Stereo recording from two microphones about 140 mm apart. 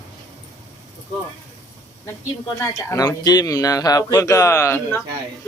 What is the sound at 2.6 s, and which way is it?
A man's voice, 25° left (ahead or behind).